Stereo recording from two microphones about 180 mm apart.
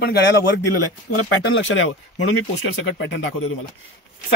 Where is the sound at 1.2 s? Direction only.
90° left.